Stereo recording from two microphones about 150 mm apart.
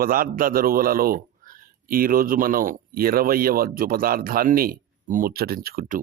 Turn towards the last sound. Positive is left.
turn(degrees=-70)  # may be behind; listen again after turning